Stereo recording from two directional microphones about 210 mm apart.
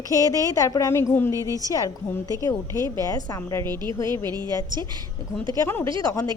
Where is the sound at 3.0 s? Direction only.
15° left (ahead or behind).